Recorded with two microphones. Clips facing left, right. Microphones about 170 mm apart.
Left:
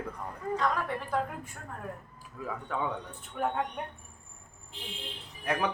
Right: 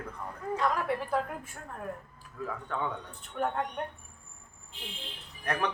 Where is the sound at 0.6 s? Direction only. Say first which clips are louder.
Right 3 dB; 5° right (ahead or behind).